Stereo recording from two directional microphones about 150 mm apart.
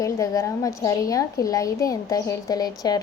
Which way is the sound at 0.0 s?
20° left (ahead or behind).